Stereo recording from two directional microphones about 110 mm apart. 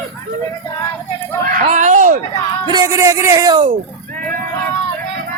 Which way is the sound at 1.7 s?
90° right.